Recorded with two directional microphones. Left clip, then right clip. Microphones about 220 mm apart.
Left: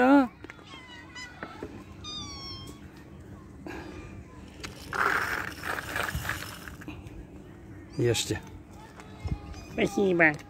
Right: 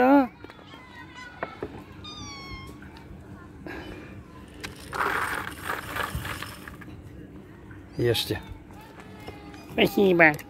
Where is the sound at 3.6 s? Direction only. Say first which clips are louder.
Right 2 dB; 10° left (ahead or behind).